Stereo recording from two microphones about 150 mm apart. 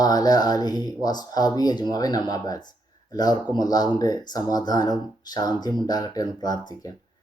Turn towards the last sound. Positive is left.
turn(degrees=25)  # may be behind; listen again after turning